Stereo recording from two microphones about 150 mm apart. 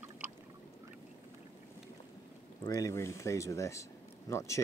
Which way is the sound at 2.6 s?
25° left (ahead or behind).